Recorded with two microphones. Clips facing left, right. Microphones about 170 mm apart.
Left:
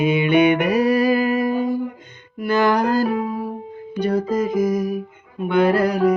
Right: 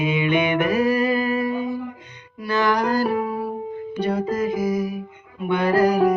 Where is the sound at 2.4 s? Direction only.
50° left (ahead or behind).